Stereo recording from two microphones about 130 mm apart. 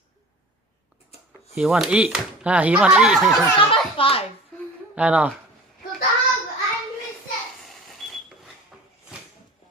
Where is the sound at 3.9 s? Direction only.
45° left (ahead or behind).